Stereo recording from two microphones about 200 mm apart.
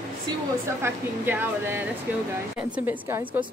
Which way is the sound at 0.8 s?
10° right (ahead or behind).